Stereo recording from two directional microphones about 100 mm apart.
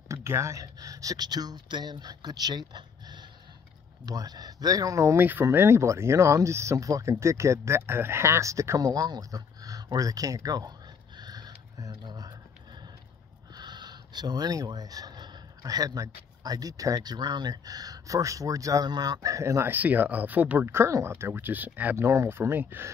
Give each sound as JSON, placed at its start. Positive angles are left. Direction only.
{"t": 0.1, "sound": "speech", "side_deg": -30}
{"t": 5.2, "sound": "speech", "side_deg": -20}
{"t": 11.1, "sound": "a sound", "side_deg": -45}
{"t": 13.6, "sound": "speech", "side_deg": -45}
{"t": 19.7, "sound": "speech", "side_deg": -15}